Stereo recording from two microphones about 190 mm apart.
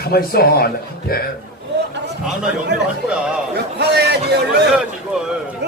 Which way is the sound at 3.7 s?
60° right (ahead or behind).